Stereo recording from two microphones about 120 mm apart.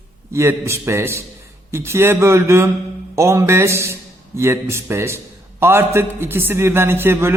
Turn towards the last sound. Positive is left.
turn(degrees=-20)  # may be behind; listen again after turning